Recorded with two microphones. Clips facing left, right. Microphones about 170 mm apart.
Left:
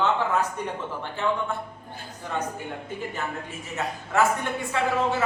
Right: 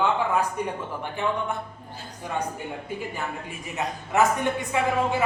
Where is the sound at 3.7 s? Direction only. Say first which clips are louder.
Right 1 dB; 20° right (ahead or behind).